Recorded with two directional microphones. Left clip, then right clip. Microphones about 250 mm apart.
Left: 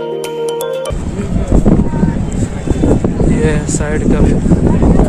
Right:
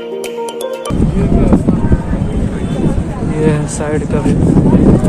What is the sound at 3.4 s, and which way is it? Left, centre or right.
Speech, centre.